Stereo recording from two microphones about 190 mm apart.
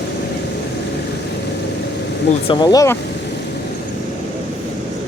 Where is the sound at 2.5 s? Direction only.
20° left (ahead or behind).